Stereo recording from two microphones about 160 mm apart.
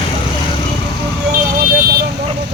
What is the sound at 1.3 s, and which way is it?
Vehicle, 65° right (ahead or behind).